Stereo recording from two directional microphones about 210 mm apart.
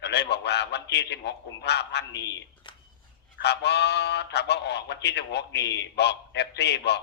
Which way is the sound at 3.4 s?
55° left (ahead or behind).